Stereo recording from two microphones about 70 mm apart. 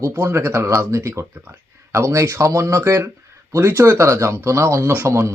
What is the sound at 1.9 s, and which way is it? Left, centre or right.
Speech, right.